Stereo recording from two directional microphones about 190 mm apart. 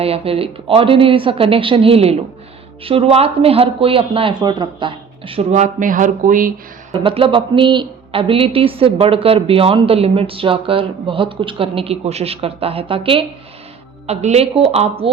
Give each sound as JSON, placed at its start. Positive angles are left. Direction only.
{"t": 0.0, "sound": "speech", "side_deg": -30}
{"t": 6.9, "sound": "speech", "side_deg": -30}